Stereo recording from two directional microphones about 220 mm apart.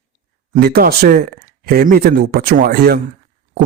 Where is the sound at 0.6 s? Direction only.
45° right (ahead or behind).